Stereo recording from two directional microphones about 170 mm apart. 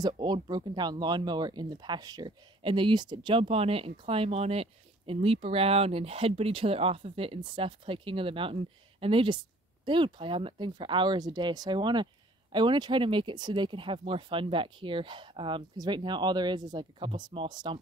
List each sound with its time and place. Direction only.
0.0 s speech: 25° right (ahead or behind)